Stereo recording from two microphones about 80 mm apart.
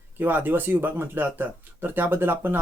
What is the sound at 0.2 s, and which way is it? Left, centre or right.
Speech, right.